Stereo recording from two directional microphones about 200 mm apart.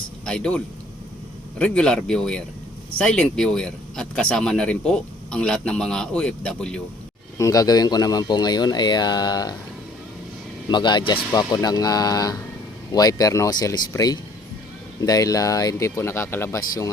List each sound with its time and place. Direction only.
0.3 s speech: 5° left (ahead or behind)
7.3 s speech: 15° left (ahead or behind)
10.7 s speech: 20° left (ahead or behind)